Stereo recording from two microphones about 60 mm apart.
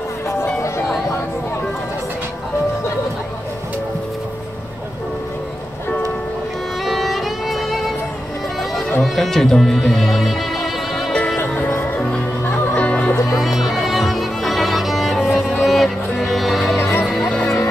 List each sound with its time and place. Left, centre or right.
6.9 s violin: centre
9.0 s speech: centre
9.9 s music: centre
12.4 s music: left
13.4 s music: centre
16.7 s music: left